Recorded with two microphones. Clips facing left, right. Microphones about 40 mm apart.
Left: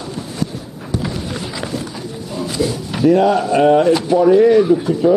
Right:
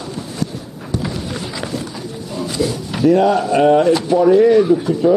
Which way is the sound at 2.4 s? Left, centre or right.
Centre.